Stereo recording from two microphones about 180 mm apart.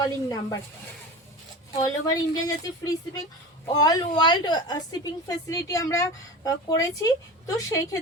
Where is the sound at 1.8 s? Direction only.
20° left (ahead or behind).